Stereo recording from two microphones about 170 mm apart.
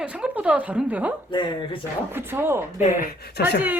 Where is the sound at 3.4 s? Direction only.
70° left (ahead or behind).